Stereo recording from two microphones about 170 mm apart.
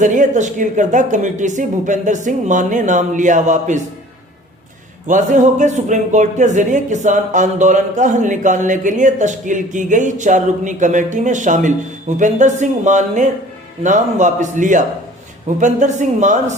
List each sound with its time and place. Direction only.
0.0 s speech: 50° right (ahead or behind)
5.0 s speech: 50° right (ahead or behind)